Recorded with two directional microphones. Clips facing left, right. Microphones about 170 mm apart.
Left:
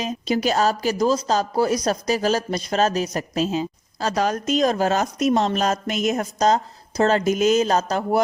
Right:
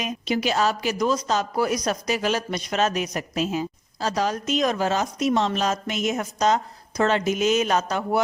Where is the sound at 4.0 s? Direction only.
50° left (ahead or behind).